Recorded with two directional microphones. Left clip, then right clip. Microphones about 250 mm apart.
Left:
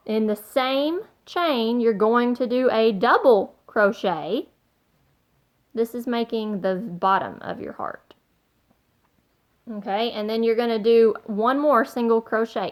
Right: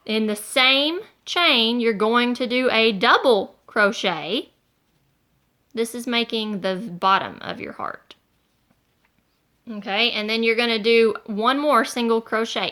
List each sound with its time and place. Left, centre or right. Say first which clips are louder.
0.0 s a woman's voice: even; right
5.7 s a woman's voice: right 1 dB; right
9.6 s a woman's voice: right 3 dB; right